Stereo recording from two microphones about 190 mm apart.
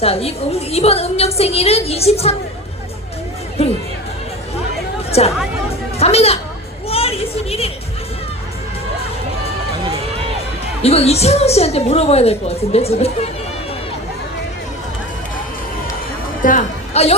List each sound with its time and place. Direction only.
0.0 s a woman's voice: 30° left (ahead or behind)
3.6 s speech: 30° left (ahead or behind)
5.2 s a woman's voice: 35° left (ahead or behind)
6.8 s a sound: 30° left (ahead or behind)
10.8 s a woman's voice: 35° left (ahead or behind)
16.4 s a woman's voice: 40° left (ahead or behind)